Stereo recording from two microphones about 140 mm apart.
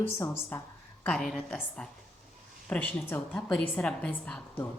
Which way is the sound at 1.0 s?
5° left (ahead or behind).